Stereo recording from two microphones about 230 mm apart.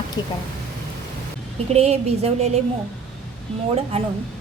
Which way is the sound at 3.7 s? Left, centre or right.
Right.